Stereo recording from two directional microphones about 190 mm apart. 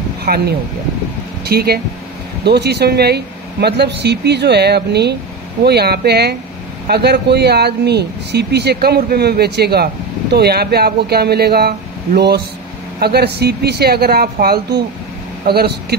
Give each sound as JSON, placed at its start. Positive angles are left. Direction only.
{"t": 0.2, "sound": "speech", "side_deg": -55}